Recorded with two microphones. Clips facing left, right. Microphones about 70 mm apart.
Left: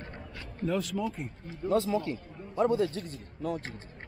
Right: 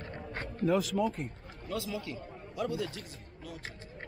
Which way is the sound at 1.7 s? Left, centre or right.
Left.